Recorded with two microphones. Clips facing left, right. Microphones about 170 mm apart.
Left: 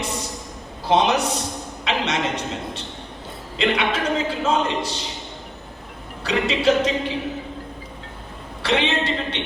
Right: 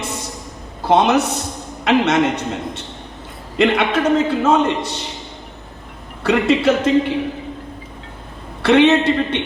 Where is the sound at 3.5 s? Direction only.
60° right (ahead or behind).